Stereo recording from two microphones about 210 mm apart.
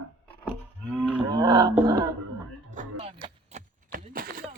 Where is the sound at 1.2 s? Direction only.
20° right (ahead or behind).